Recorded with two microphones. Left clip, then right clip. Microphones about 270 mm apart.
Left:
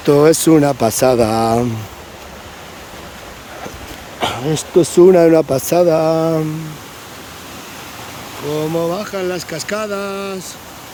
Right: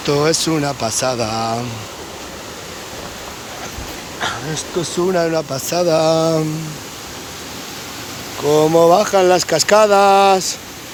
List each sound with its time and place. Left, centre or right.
0.0 s speech: left
4.2 s speech: left; by 6.4 s centre
8.4 s speech: centre